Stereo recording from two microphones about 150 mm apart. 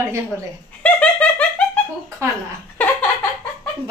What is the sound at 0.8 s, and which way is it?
Laughter, 10° left (ahead or behind).